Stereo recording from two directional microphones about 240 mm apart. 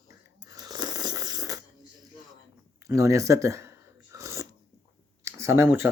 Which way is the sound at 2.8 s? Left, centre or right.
Centre.